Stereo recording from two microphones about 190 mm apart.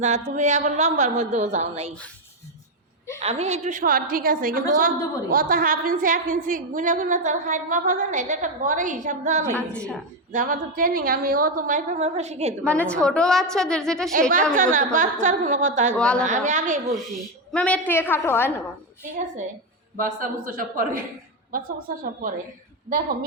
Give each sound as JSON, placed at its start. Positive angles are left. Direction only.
{"t": 0.0, "sound": "a woman's voice", "side_deg": -40}
{"t": 3.2, "sound": "a woman's voice", "side_deg": -35}
{"t": 9.5, "sound": "a woman's voice", "side_deg": 5}
{"t": 10.3, "sound": "a woman's voice", "side_deg": -45}
{"t": 12.6, "sound": "a woman's voice", "side_deg": 5}
{"t": 14.1, "sound": "a woman's voice", "side_deg": -45}
{"t": 16.0, "sound": "a woman's voice", "side_deg": 5}
{"t": 16.2, "sound": "a woman's voice", "side_deg": -40}
{"t": 17.5, "sound": "a woman's voice", "side_deg": 5}
{"t": 20.0, "sound": "a woman's voice", "side_deg": -45}